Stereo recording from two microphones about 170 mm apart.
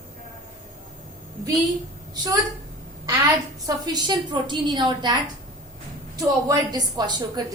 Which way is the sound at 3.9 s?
25° right (ahead or behind).